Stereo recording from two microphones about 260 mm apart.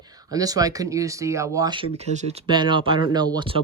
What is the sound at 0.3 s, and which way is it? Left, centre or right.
Speech, centre.